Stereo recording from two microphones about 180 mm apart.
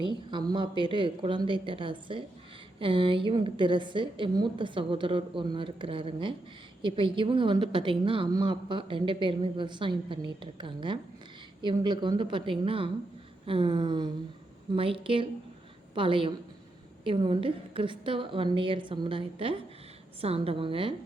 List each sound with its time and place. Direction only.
0.0 s a woman's voice: 25° right (ahead or behind)